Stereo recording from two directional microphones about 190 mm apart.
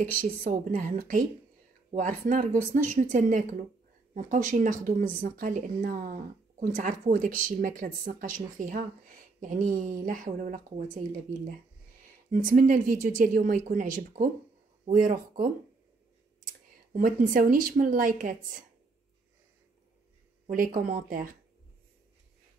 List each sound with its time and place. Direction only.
0.0 s speech: 45° right (ahead or behind)
12.3 s speech: 45° right (ahead or behind)
16.9 s speech: 45° right (ahead or behind)
20.4 s speech: 45° right (ahead or behind)